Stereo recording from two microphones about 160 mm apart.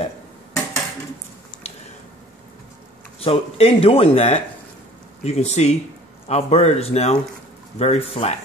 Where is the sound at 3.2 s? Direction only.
35° left (ahead or behind).